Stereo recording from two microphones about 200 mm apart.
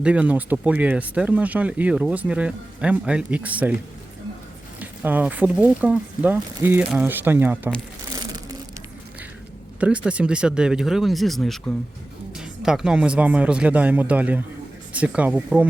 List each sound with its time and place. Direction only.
0.0 s speech: 5° right (ahead or behind)
4.8 s speech: 10° right (ahead or behind)
8.1 s crushing: 20° right (ahead or behind)
9.8 s speech: 5° right (ahead or behind)